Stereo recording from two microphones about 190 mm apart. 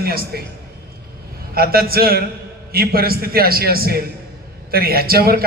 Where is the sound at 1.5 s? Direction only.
50° right (ahead or behind).